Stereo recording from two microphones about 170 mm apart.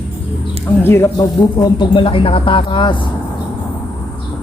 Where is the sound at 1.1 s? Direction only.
25° left (ahead or behind).